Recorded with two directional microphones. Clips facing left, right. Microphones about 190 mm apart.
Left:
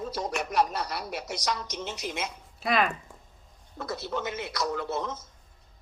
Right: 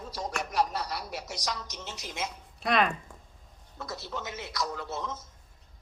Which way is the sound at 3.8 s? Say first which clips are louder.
Left 5 dB; 60° left (ahead or behind).